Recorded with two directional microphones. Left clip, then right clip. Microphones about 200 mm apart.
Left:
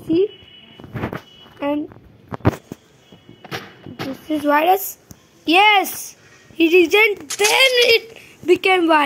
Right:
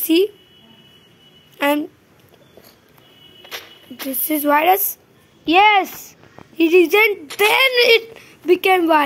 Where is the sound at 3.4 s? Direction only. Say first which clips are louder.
Left 3 dB; 20° right (ahead or behind).